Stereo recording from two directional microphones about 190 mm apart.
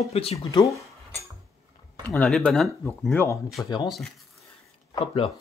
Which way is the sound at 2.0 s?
5° left (ahead or behind).